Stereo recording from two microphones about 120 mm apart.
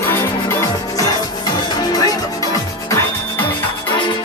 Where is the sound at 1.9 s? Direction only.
35° left (ahead or behind).